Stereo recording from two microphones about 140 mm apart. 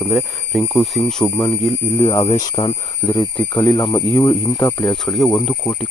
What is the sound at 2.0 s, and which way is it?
Speech, 45° left (ahead or behind).